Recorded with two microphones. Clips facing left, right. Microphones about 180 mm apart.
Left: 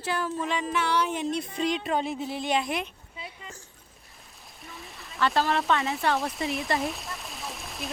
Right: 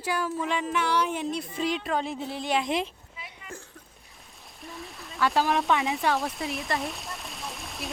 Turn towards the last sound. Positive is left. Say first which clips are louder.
# even
turn(degrees=0)  # may be behind; listen again after turning